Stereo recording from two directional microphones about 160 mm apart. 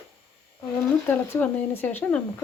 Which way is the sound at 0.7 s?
15° left (ahead or behind).